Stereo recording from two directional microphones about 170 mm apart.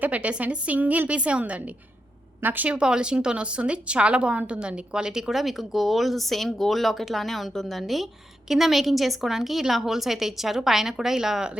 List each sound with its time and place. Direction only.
0.0 s a woman's voice: 10° right (ahead or behind)